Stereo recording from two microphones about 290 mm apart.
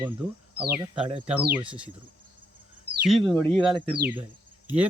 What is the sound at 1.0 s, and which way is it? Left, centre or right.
Speech, centre.